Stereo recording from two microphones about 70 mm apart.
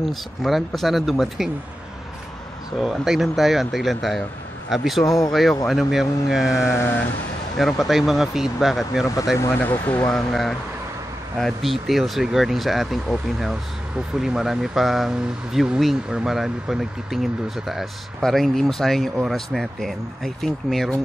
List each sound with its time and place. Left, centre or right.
0.0 s speech: centre
2.8 s speech: centre
5.0 s speech: left
5.3 s speech: centre
6.6 s speech: left
7.5 s speech: centre
9.4 s speech: left
10.1 s speech: centre